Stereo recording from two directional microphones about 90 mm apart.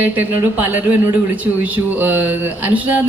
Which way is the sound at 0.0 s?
20° right (ahead or behind).